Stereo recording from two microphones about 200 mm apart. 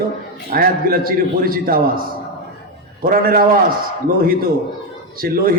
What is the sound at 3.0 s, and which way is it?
Speech, 45° right (ahead or behind).